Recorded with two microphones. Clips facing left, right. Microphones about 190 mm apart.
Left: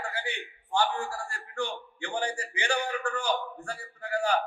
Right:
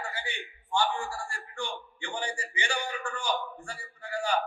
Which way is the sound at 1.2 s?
60° left (ahead or behind).